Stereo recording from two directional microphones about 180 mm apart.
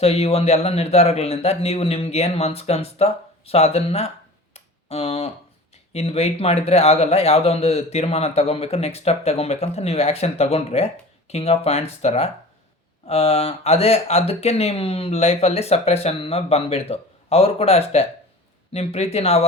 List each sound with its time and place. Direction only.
0.0 s speech: 35° left (ahead or behind)
4.5 s tick: 35° left (ahead or behind)
5.9 s speech: 35° left (ahead or behind)